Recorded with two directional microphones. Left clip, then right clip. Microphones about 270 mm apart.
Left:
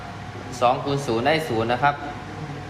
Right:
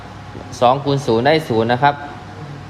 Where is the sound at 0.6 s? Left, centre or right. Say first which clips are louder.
Right 6 dB; right.